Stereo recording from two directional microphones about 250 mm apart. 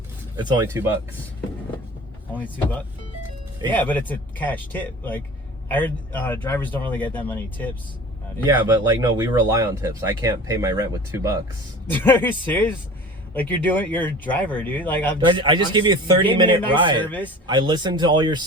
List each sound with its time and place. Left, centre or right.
0.3 s speech: centre
3.7 s speech: centre
8.5 s speech: centre
11.9 s speech: centre
15.3 s speech: centre
17.0 s speech: centre
17.4 s speech: centre